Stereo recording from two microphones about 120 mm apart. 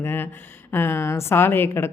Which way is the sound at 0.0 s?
20° left (ahead or behind).